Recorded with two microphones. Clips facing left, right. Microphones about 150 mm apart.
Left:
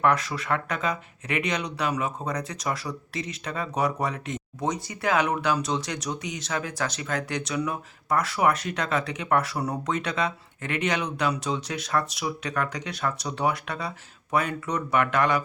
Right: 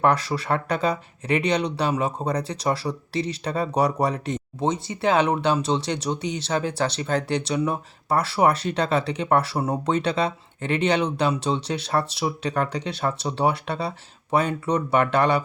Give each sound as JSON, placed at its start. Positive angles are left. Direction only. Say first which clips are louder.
{"t": 0.0, "sound": "speech", "louder": "right 3 dB", "side_deg": -35}